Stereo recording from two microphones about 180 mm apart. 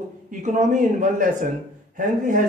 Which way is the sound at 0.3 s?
45° right (ahead or behind).